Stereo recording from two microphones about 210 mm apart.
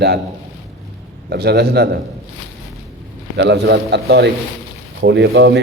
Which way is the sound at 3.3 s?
55° right (ahead or behind).